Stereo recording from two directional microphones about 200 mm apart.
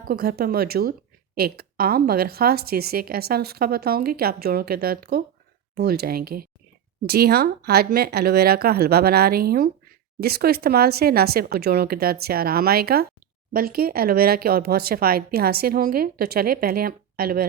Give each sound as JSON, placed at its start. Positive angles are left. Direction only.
{"t": 0.1, "sound": "speech", "side_deg": -50}